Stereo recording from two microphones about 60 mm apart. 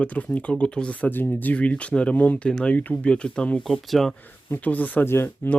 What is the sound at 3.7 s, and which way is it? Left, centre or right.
Speech, centre.